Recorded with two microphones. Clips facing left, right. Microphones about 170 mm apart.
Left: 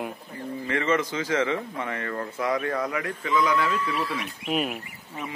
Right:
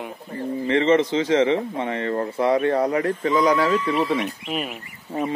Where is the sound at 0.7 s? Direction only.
25° right (ahead or behind).